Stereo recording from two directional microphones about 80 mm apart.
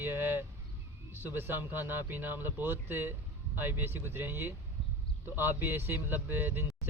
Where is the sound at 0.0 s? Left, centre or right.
Right.